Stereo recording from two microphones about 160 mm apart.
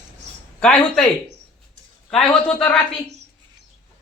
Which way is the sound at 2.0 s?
5° left (ahead or behind).